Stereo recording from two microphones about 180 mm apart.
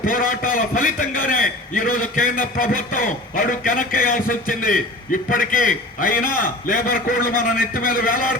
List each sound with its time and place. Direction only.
0.0 s a man's voice: 50° left (ahead or behind)